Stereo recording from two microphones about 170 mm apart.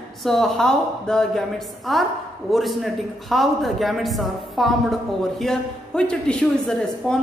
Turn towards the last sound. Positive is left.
turn(degrees=5)  # may be behind; listen again after turning